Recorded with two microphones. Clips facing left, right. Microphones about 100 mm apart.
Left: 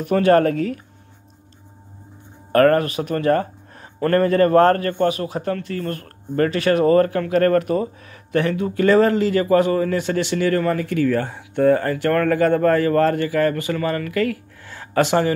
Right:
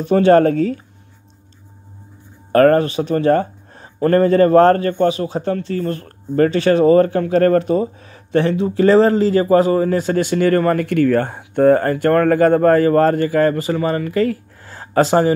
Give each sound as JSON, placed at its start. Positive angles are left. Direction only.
{"t": 0.0, "sound": "speech", "side_deg": -25}
{"t": 2.5, "sound": "speech", "side_deg": -30}